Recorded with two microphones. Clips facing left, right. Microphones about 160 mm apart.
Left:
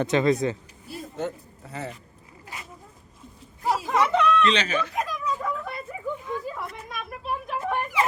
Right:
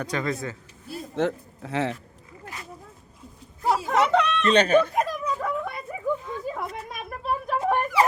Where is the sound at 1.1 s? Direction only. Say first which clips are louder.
Right 7 dB; 90° right.